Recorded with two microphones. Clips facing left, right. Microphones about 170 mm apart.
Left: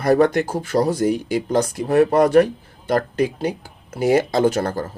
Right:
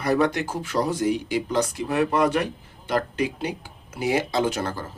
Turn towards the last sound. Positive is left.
turn(degrees=45)  # may be behind; listen again after turning